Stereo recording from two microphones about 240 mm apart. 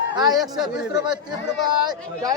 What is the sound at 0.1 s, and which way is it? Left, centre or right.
A man's voice, centre.